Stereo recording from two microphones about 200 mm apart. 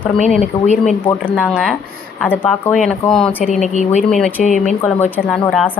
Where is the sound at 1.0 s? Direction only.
5° left (ahead or behind).